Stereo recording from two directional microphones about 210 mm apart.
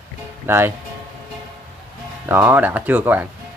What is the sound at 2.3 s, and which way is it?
Speech, 10° right (ahead or behind).